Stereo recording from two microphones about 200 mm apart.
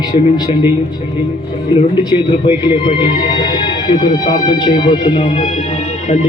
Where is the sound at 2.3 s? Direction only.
25° left (ahead or behind).